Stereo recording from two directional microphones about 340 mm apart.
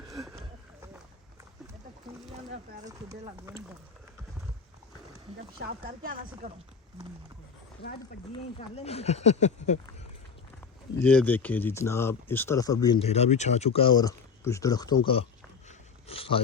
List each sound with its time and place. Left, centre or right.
0.0 s a sound: centre
5.5 s speech: right
7.8 s speech: left
11.0 s speech: centre